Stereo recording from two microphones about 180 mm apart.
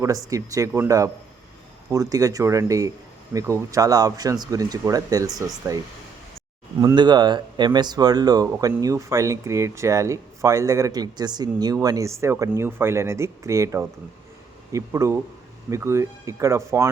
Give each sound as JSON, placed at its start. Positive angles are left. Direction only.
{"t": 0.0, "sound": "speech", "side_deg": -20}